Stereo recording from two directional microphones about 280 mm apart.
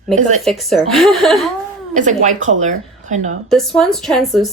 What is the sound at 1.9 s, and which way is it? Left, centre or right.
Speech, right.